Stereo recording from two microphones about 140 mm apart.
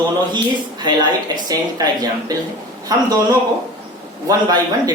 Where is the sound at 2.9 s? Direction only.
25° right (ahead or behind).